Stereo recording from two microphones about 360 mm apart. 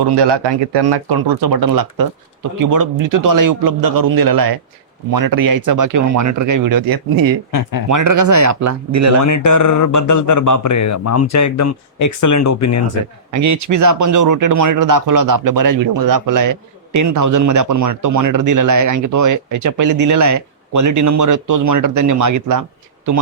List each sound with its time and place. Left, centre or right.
0.2 s a man's voice: right
9.2 s speech: left
13.3 s speech: right